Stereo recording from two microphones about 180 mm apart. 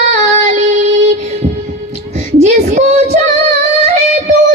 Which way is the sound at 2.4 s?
40° right (ahead or behind).